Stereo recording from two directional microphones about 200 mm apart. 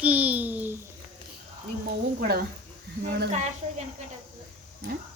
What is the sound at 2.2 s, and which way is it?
Speech, 50° right (ahead or behind).